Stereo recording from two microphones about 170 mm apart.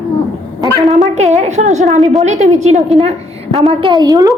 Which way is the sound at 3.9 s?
20° right (ahead or behind).